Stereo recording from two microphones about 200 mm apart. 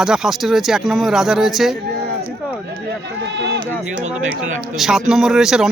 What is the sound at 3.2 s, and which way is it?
Speech, 60° right (ahead or behind).